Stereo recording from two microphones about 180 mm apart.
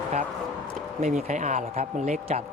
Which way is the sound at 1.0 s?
40° right (ahead or behind).